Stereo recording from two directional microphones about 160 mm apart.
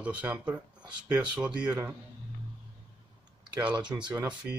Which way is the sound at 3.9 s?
15° right (ahead or behind).